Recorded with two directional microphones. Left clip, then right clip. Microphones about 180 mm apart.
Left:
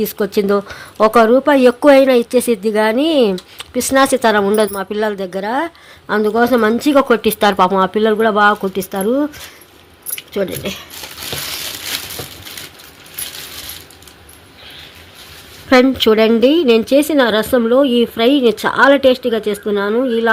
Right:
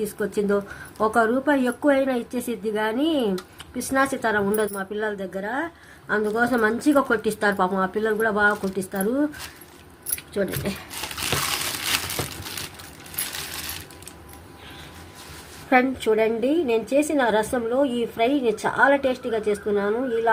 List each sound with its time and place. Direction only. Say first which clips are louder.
0.2 s a woman's voice: left 8 dB; 40° left (ahead or behind)
10.3 s a woman's voice: left 7 dB; 30° left (ahead or behind)
15.7 s a woman's voice: left 9 dB; 50° left (ahead or behind)